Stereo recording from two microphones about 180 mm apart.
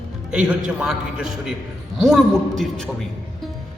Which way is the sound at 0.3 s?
5° right (ahead or behind).